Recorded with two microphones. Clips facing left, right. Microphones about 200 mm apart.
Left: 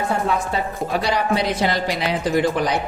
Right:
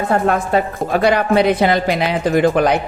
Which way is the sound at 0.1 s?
55° right (ahead or behind).